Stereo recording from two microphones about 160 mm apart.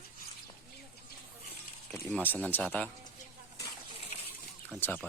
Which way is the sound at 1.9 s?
5° left (ahead or behind).